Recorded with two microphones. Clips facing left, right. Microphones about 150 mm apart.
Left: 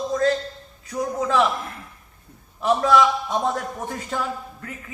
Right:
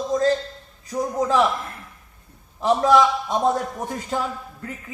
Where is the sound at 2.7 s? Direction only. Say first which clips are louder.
Right 2 dB; 15° right (ahead or behind).